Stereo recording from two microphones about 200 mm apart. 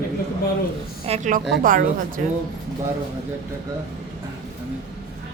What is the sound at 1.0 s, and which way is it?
A woman's voice, 35° right (ahead or behind).